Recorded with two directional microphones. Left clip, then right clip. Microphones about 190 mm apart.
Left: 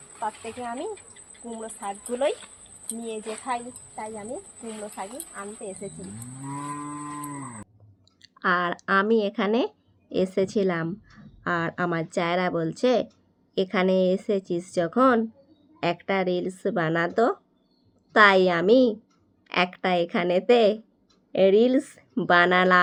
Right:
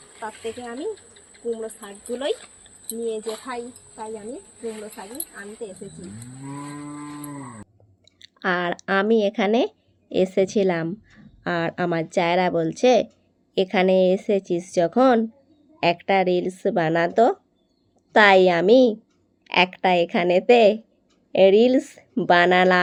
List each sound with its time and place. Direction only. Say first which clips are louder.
3.1 s speech: left 1 dB; 40° left (ahead or behind)
8.0 s speech: even; 15° right (ahead or behind)